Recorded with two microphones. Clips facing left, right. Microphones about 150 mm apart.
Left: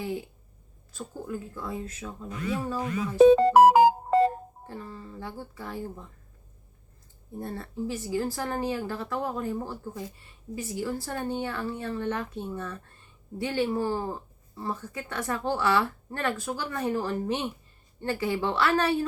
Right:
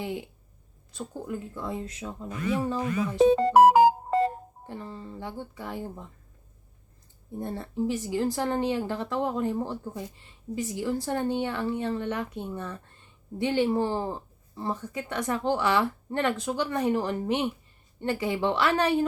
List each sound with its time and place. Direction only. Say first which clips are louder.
0.0 s a sound: even; 20° right (ahead or behind)
1.5 s speech: right 1 dB; 25° right (ahead or behind)
3.2 s music: left 1 dB; 90° left
4.6 s speech: right 4 dB; 20° right (ahead or behind)
7.3 s a woman's voice: right 3 dB; 20° right (ahead or behind)